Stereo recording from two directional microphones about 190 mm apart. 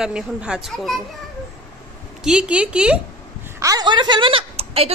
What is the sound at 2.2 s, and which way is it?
Speech, 5° right (ahead or behind).